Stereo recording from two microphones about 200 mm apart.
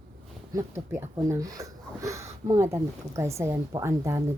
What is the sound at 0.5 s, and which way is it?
Speech, 15° right (ahead or behind).